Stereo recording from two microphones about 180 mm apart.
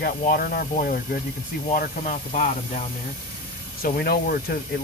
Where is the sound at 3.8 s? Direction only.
55° left (ahead or behind).